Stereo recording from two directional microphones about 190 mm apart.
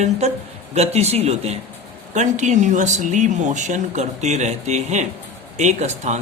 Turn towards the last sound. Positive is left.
turn(degrees=-35)  # may be behind; listen again after turning